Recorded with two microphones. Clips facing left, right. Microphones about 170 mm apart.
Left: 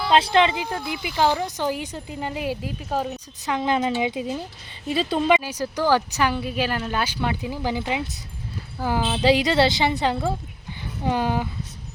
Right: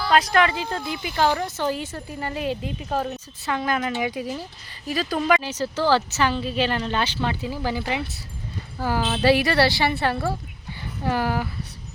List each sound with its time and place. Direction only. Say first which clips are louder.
0.0 s speech: left 1 dB; 25° left (ahead or behind)
5.4 s speech: even; 10° left (ahead or behind)